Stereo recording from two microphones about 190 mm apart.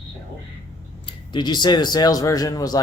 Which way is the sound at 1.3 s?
25° left (ahead or behind).